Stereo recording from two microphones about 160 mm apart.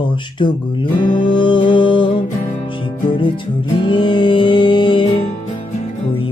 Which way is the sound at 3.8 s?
30° left (ahead or behind).